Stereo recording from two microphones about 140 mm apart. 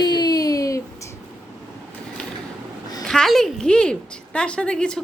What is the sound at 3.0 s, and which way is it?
A woman's voice, 5° left (ahead or behind).